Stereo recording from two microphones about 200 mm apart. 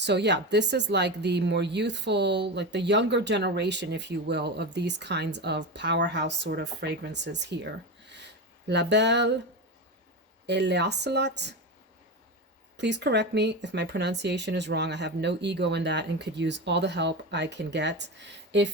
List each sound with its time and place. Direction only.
0.0 s speech: 60° right (ahead or behind)
10.4 s speech: 60° right (ahead or behind)
12.7 s speech: 60° right (ahead or behind)